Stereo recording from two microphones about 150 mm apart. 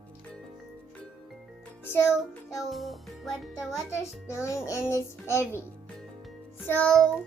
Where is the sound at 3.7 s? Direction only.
20° left (ahead or behind).